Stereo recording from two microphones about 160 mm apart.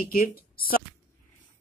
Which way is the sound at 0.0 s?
65° left (ahead or behind).